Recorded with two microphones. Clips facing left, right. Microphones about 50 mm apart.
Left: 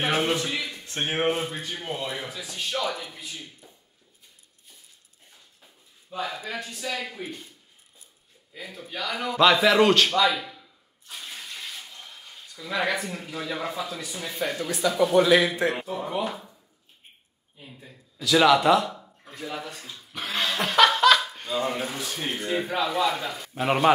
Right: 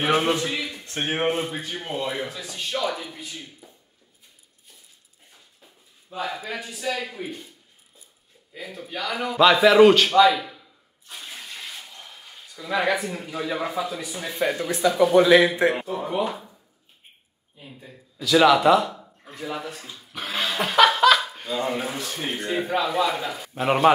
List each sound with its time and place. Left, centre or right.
0.0 s speech: centre
6.0 s speech: centre
8.5 s a man's voice: centre
15.3 s a man's voice: centre
15.7 s speech: centre
17.6 s speech: centre